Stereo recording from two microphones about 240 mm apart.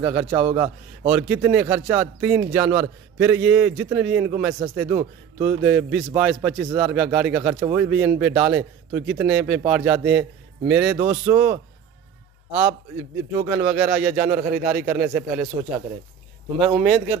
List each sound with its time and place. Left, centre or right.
0.0 s a man's voice: centre
0.3 s a man's voice: right
1.1 s a man's voice: centre
13.5 s a man's voice: centre
16.5 s a man's voice: centre